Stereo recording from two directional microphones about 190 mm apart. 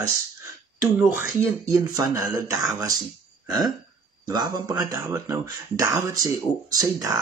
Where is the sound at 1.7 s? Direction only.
15° right (ahead or behind).